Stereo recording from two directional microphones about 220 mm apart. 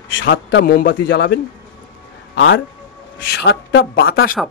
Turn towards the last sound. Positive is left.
turn(degrees=45)  # may be behind; listen again after turning